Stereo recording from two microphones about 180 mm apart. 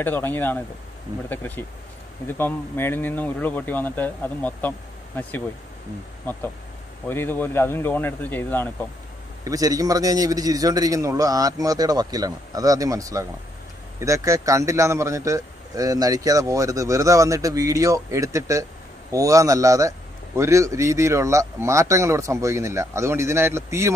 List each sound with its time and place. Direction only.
0.0 s speech: 10° left (ahead or behind)
7.1 s speech: 10° left (ahead or behind)
9.4 s a man's voice: 20° right (ahead or behind)